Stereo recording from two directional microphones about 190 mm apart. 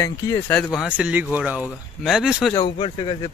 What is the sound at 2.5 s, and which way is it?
Speech, 25° left (ahead or behind).